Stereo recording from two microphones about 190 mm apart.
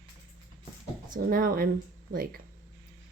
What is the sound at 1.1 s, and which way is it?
Speech, 50° right (ahead or behind).